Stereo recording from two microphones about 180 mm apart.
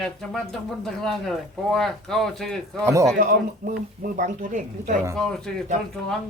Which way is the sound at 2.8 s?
15° right (ahead or behind).